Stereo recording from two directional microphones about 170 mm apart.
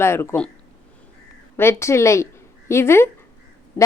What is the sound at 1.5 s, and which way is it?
Speech, 15° left (ahead or behind).